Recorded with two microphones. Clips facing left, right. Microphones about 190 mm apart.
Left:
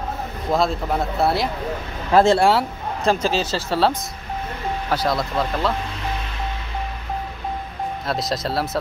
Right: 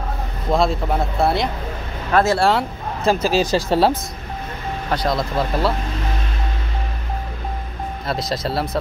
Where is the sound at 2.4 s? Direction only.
Centre (ahead or behind); by 3.9 s 15° right (ahead or behind).